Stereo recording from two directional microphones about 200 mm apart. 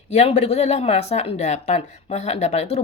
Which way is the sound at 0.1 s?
30° left (ahead or behind).